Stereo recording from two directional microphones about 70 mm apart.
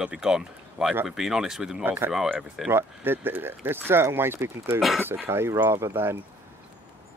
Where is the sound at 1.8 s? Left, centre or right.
Right.